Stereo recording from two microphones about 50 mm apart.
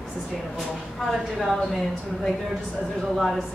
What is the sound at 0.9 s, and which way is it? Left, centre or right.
Speech, centre.